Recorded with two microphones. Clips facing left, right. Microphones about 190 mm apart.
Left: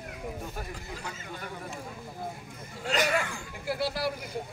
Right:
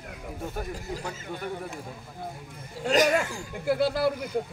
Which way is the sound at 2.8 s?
45° right (ahead or behind).